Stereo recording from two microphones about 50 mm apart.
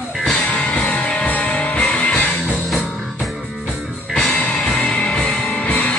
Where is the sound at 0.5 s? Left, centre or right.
Left.